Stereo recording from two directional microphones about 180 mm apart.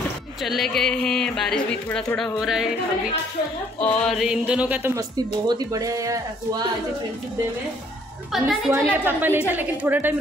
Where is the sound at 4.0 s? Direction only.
Centre (ahead or behind); by 6.6 s 20° right (ahead or behind).